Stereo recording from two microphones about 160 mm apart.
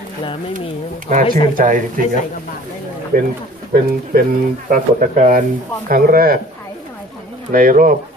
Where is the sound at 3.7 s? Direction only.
60° right (ahead or behind).